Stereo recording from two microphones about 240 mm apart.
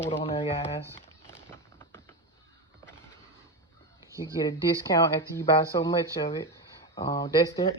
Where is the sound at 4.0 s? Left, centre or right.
Centre.